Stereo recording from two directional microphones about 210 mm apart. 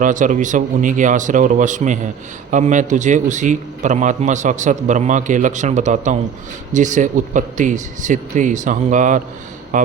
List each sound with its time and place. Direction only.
0.0 s a man's voice: 40° right (ahead or behind)